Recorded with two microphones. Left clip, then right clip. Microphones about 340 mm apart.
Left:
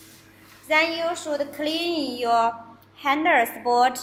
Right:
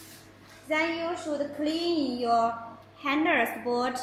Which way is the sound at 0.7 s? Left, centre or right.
Left.